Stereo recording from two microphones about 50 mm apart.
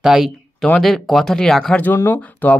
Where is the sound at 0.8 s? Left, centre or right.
Centre.